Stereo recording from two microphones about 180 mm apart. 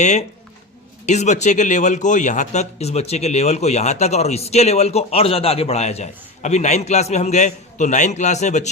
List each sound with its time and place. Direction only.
0.0 s speech: 40° left (ahead or behind)